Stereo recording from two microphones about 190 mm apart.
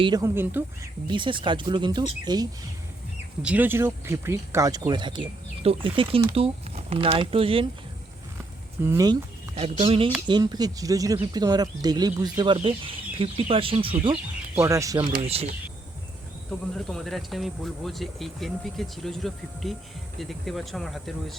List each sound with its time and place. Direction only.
0.0 s speech: 20° right (ahead or behind)
1.0 s speech: 25° right (ahead or behind)
3.4 s speech: 10° right (ahead or behind); by 7.7 s 30° right (ahead or behind)
8.8 s speech: 15° right (ahead or behind)
9.6 s speech: 30° right (ahead or behind)
14.5 s speech: 15° right (ahead or behind)
15.1 s speech: 30° right (ahead or behind)
16.7 s speech: centre (ahead or behind)